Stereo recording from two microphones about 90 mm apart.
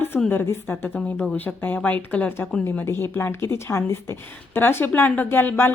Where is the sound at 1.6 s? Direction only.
20° left (ahead or behind).